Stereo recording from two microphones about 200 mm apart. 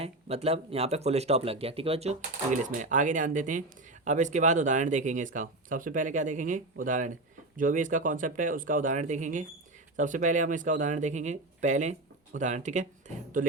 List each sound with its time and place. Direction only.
0.0 s speech: 30° right (ahead or behind)